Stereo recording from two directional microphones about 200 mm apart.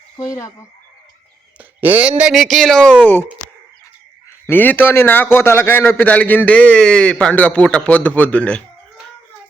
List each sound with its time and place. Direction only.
0.2 s a man's voice: 15° left (ahead or behind)
1.5 s speech: 5° right (ahead or behind); by 3.2 s 10° left (ahead or behind)
4.4 s a man's voice: 10° left (ahead or behind)